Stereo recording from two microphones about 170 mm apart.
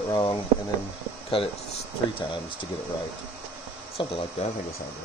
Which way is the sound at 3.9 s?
35° left (ahead or behind).